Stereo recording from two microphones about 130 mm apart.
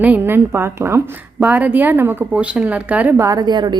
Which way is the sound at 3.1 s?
25° right (ahead or behind).